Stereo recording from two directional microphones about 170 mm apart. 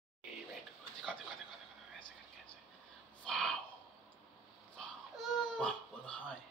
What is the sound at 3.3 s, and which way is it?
Gasp, 5° left (ahead or behind).